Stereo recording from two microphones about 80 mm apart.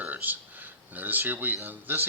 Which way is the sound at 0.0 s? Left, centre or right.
Right.